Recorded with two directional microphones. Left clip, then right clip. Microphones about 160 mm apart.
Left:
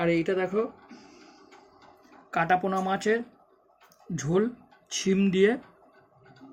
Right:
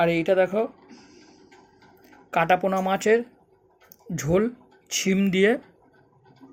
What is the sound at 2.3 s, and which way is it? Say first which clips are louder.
Speech: right 4 dB; 30° right (ahead or behind).